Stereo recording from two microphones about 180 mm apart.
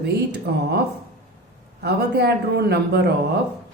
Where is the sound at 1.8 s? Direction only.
65° right (ahead or behind).